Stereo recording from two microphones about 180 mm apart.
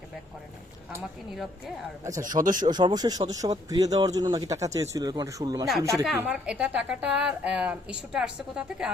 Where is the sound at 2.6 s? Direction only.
25° right (ahead or behind).